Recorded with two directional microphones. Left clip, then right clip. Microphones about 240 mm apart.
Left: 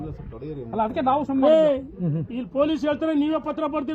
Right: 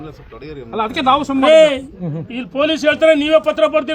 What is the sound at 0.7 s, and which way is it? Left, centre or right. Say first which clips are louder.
A man's voice: right 7 dB; left.